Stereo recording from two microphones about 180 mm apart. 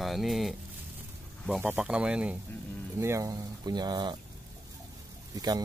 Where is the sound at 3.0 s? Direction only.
15° right (ahead or behind).